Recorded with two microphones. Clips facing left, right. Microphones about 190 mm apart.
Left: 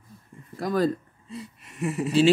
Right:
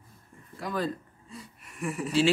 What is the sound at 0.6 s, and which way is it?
Speech, 40° left (ahead or behind).